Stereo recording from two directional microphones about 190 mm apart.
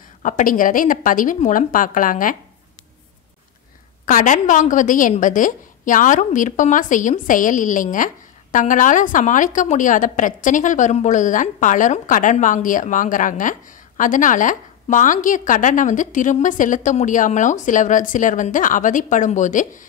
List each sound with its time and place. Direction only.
0.2 s a woman's voice: 45° left (ahead or behind)
4.0 s a woman's voice: 45° left (ahead or behind)